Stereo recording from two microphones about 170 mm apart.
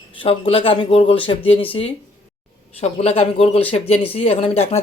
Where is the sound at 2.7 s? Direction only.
35° left (ahead or behind).